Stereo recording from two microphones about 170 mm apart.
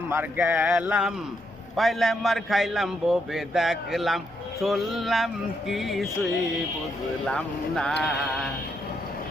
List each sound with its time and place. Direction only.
0.1 s a man's voice: 15° right (ahead or behind); by 7.9 s 5° left (ahead or behind)